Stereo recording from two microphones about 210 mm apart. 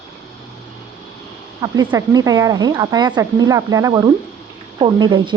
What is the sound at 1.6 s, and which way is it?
Speech, 20° right (ahead or behind).